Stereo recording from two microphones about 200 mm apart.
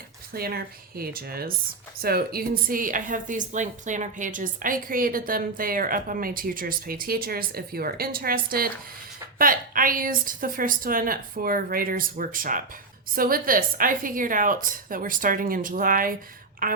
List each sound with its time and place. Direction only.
0.3 s a woman's voice: 50° right (ahead or behind)